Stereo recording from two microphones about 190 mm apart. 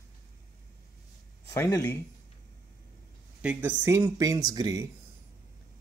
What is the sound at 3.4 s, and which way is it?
Speech, 10° right (ahead or behind).